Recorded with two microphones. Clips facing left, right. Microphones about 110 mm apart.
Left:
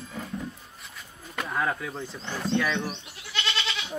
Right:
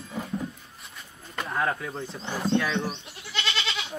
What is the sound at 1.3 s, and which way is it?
Speech, centre (ahead or behind).